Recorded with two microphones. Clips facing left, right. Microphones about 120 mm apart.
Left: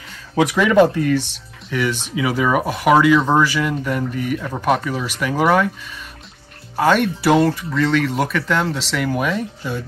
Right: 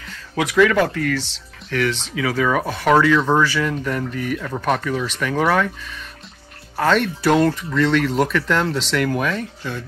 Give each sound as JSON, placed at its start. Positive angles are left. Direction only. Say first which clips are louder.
{"t": 0.4, "sound": "speech", "louder": "left 3 dB", "side_deg": 20}
{"t": 1.7, "sound": "speech", "louder": "even", "side_deg": 10}
{"t": 6.8, "sound": "speech", "louder": "left 2 dB", "side_deg": 10}